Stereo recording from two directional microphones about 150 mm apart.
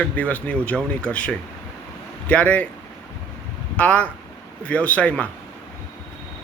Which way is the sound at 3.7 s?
10° left (ahead or behind).